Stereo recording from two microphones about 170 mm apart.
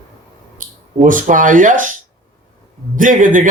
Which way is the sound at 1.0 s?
50° right (ahead or behind).